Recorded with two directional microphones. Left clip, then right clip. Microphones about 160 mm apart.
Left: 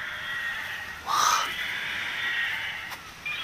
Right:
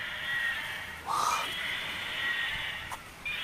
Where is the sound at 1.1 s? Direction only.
5° right (ahead or behind).